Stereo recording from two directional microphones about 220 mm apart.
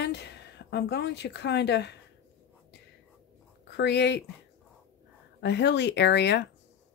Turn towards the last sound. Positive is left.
turn(degrees=50)  # may be behind; listen again after turning